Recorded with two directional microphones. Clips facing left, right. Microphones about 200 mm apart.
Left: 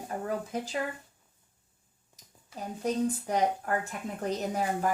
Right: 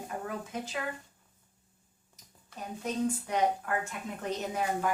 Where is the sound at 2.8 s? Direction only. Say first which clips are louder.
Left 3 dB; 35° left (ahead or behind).